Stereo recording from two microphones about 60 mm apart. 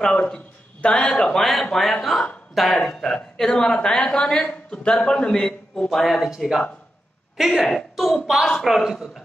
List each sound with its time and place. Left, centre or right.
0.0 s a woman's voice: centre
5.9 s a woman's voice: centre
6.3 s speech: centre
7.3 s a woman's voice: centre